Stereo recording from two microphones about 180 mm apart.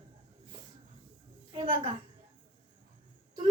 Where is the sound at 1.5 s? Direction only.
25° right (ahead or behind).